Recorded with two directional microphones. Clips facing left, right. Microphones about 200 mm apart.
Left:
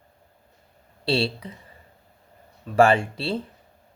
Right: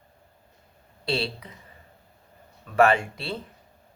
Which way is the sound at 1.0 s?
30° left (ahead or behind).